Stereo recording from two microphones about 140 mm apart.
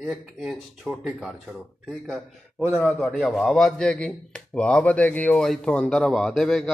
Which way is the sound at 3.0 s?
10° left (ahead or behind).